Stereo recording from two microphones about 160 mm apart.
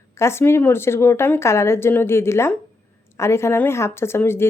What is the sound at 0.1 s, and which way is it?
Speech, 15° left (ahead or behind).